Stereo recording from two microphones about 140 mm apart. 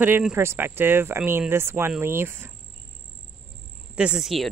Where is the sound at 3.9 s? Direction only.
5° right (ahead or behind).